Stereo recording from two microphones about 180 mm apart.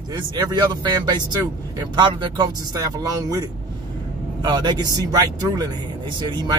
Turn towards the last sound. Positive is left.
turn(degrees=-25)  # may be behind; listen again after turning